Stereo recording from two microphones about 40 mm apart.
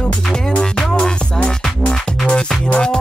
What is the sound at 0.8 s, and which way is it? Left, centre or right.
Music, centre.